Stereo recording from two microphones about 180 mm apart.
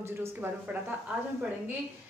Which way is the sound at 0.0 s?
15° right (ahead or behind).